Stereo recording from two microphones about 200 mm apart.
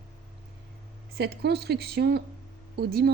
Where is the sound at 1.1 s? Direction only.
55° right (ahead or behind).